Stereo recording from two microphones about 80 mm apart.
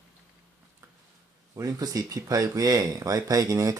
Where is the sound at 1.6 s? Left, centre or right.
Right.